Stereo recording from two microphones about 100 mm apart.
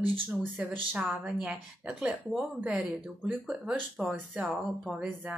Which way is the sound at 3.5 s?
10° right (ahead or behind).